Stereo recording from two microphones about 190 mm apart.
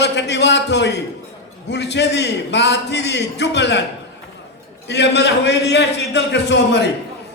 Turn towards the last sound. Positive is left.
turn(degrees=60)  # may be behind; listen again after turning